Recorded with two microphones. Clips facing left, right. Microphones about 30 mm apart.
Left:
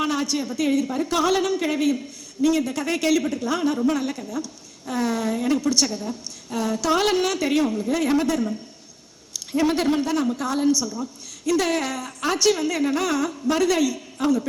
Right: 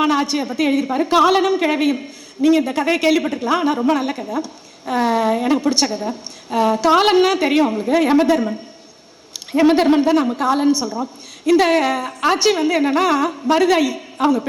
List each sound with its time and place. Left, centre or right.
0.0 s a woman's voice: right